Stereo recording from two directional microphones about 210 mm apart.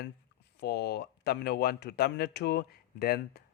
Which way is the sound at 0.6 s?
50° left (ahead or behind).